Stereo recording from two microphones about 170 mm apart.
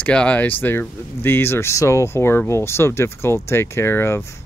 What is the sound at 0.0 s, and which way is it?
Speech, 5° left (ahead or behind).